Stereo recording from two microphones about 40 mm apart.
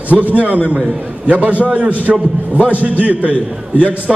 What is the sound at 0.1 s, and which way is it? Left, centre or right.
A man's voice, right.